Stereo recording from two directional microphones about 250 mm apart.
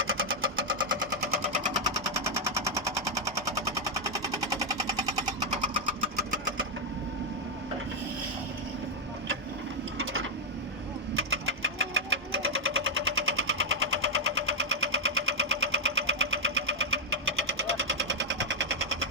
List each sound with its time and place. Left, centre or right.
0.0 s sewing machine: right
1.7 s a sound: centre
10.0 s printer: right
11.1 s sewing machine: right